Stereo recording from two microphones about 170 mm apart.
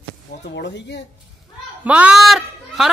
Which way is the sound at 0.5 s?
85° left.